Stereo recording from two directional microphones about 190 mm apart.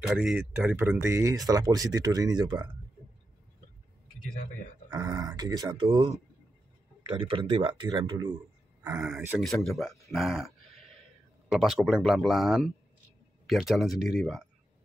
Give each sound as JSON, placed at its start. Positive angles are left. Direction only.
{"t": 0.0, "sound": "speech", "side_deg": -5}
{"t": 4.9, "sound": "speech", "side_deg": -20}
{"t": 8.9, "sound": "speech", "side_deg": 0}